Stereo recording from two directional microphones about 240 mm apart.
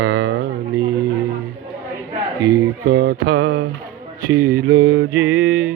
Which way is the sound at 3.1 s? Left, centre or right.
Right.